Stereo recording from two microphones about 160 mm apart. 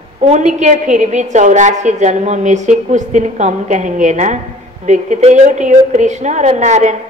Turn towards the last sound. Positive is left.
turn(degrees=-50)  # may be behind; listen again after turning